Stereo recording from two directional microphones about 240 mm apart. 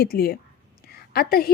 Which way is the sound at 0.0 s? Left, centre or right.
Left.